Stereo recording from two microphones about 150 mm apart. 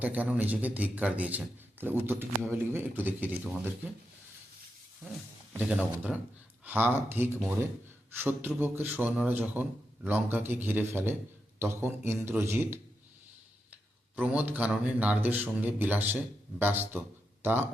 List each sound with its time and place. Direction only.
0.0 s speech: 10° right (ahead or behind)
5.5 s speech: 10° right (ahead or behind)
14.2 s speech: 10° right (ahead or behind)